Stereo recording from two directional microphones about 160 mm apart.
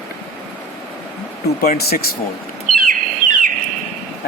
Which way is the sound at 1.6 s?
75° left (ahead or behind).